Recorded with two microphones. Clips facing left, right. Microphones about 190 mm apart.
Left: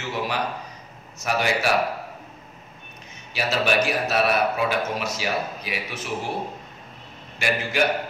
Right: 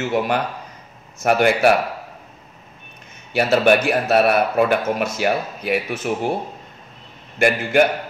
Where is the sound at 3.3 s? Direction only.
55° right (ahead or behind).